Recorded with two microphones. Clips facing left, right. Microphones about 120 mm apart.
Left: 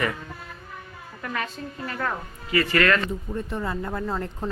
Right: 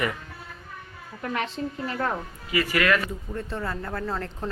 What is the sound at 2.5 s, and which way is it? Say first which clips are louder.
Speech: left 2 dB; 10° right (ahead or behind).